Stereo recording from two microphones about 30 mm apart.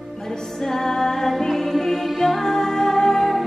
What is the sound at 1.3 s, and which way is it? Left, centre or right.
Music, centre.